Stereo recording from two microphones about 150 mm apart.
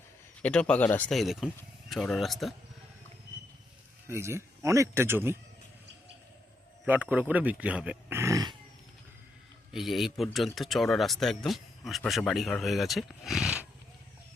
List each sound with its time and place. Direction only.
0.4 s speech: 10° left (ahead or behind)
4.0 s a man's voice: 15° right (ahead or behind)
6.8 s a man's voice: 10° right (ahead or behind)
8.2 s dog: 25° right (ahead or behind)
9.7 s speech: centre (ahead or behind)